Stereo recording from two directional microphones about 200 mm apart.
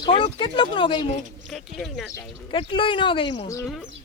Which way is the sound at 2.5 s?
25° left (ahead or behind).